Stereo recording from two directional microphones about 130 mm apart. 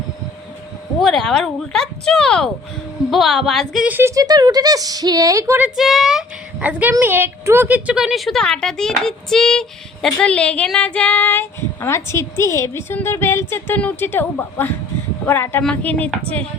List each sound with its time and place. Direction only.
0.9 s speech: centre (ahead or behind)
3.8 s speech: 15° right (ahead or behind)
4.1 s speech: 30° right (ahead or behind)
5.6 s speech: 5° right (ahead or behind)